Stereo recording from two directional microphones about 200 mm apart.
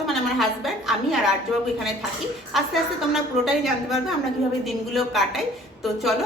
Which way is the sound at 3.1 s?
Centre (ahead or behind).